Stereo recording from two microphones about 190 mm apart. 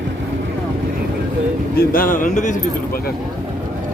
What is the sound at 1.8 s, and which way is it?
Speech, 50° left (ahead or behind).